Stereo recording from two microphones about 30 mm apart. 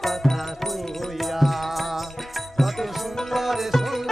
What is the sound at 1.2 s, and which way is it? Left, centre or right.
Music, centre.